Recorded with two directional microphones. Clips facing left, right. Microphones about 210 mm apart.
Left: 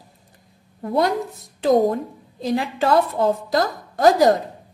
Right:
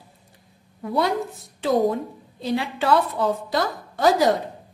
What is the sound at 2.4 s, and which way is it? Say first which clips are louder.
A woman's voice: left 3 dB; 45° left (ahead or behind).